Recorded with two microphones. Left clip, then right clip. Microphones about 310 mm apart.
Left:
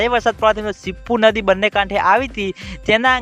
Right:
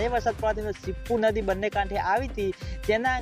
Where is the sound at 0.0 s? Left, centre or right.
Left.